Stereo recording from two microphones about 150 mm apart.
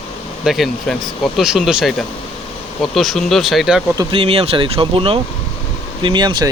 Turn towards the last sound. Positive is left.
turn(degrees=-30)  # may be behind; listen again after turning